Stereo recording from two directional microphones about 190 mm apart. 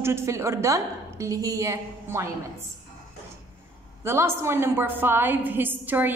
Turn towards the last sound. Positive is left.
turn(degrees=-10)  # may be behind; listen again after turning